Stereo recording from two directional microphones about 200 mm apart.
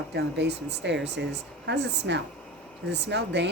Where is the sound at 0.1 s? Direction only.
55° right (ahead or behind).